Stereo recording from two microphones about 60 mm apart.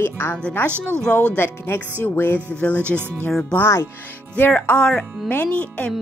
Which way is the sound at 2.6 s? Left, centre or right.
Left.